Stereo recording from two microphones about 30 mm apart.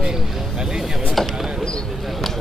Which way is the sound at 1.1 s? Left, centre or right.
Centre.